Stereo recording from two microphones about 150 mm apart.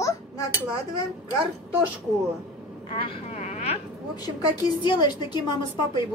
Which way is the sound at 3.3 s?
45° left (ahead or behind).